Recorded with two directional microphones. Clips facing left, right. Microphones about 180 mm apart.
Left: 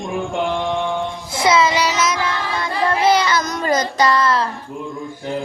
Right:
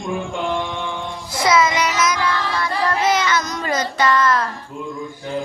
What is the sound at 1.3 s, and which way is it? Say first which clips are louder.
Child singing: left 1 dB; 25° left (ahead or behind).